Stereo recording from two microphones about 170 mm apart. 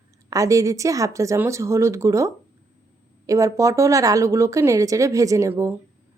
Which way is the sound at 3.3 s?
20° right (ahead or behind).